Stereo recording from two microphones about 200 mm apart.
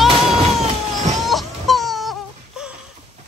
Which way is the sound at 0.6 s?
35° right (ahead or behind).